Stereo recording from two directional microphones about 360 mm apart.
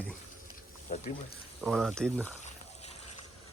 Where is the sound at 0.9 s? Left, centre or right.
Left.